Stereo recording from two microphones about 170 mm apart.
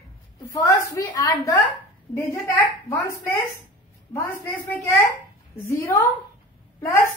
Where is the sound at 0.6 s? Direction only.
20° left (ahead or behind).